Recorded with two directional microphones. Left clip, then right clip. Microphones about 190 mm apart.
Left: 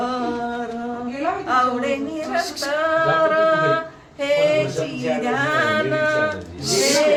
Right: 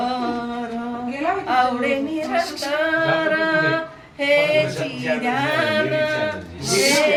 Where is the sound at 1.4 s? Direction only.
15° left (ahead or behind).